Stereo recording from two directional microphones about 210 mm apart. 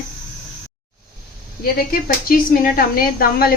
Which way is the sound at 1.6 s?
45° left (ahead or behind).